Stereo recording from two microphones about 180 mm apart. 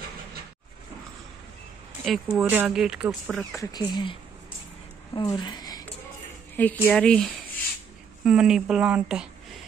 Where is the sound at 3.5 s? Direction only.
20° left (ahead or behind).